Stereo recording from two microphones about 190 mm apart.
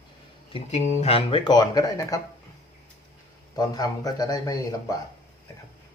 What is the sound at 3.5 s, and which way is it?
Speech, 20° left (ahead or behind).